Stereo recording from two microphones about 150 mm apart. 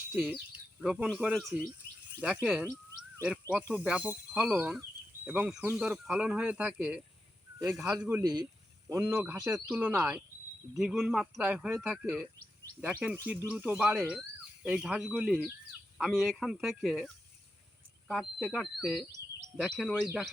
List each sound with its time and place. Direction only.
0.1 s speech: 5° right (ahead or behind)
8.2 s speech: 30° right (ahead or behind)
8.9 s speech: 15° right (ahead or behind)
18.1 s speech: 5° left (ahead or behind)